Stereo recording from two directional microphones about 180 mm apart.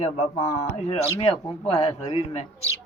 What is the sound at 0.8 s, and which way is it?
Speech, 35° left (ahead or behind).